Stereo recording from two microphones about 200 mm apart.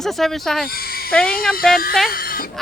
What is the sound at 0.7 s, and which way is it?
Speech, 50° left (ahead or behind).